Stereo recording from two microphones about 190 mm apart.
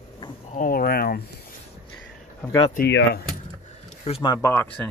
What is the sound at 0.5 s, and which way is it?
Speech, 50° left (ahead or behind).